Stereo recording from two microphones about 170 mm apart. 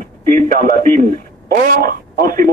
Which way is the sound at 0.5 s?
55° right (ahead or behind).